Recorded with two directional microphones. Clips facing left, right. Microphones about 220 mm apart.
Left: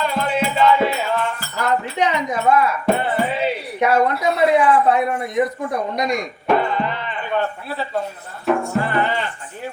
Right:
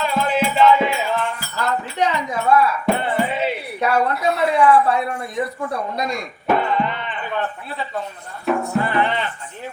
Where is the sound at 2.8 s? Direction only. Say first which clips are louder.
Left 1 dB; centre (ahead or behind).